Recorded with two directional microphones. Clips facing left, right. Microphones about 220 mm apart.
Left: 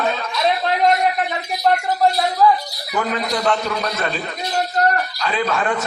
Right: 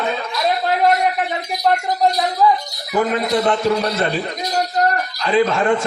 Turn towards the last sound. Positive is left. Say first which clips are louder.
# right 5 dB
turn(degrees=-25)  # may be behind; listen again after turning